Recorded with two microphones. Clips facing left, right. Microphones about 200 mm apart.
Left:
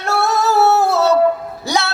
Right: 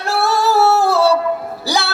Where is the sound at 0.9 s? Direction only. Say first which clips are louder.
Right 1 dB; 30° right (ahead or behind).